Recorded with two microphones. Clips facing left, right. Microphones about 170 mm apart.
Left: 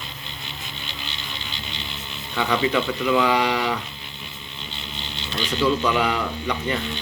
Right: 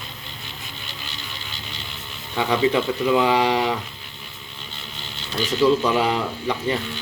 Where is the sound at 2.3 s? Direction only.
30° right (ahead or behind).